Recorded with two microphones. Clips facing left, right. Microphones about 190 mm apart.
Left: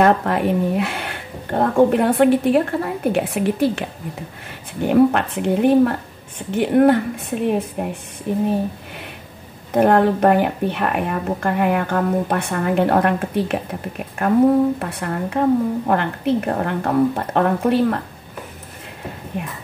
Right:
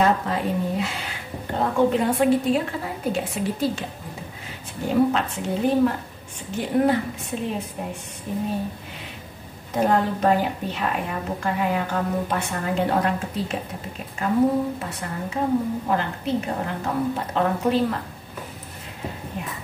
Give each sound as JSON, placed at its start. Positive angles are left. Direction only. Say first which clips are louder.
{"t": 0.0, "sound": "a woman's voice", "louder": "left 5 dB", "side_deg": 65}
{"t": 9.7, "sound": "a woman's voice", "louder": "left 7 dB", "side_deg": 65}